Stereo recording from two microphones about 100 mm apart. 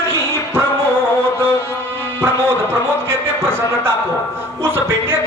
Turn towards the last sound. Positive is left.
turn(degrees=-20)  # may be behind; listen again after turning